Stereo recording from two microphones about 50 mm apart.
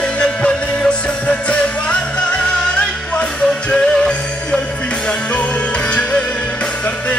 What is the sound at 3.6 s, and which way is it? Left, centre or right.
Music, centre.